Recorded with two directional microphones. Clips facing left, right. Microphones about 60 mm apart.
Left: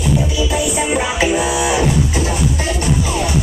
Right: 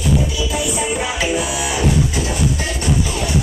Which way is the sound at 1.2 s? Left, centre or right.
Left.